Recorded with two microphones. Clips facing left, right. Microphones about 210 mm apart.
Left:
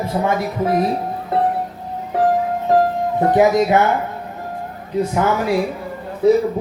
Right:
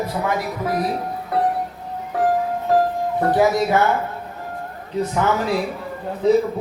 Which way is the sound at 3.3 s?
20° left (ahead or behind).